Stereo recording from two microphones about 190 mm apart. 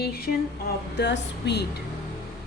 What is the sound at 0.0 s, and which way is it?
Speech, 55° left (ahead or behind).